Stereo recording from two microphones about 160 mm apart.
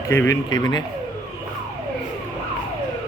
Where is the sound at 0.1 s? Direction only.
15° left (ahead or behind).